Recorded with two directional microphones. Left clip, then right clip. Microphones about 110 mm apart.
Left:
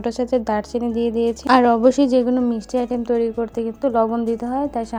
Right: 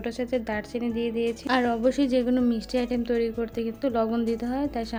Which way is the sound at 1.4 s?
65° left (ahead or behind).